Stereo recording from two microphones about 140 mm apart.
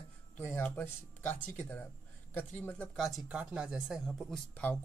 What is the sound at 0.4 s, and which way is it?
Speech, 15° left (ahead or behind).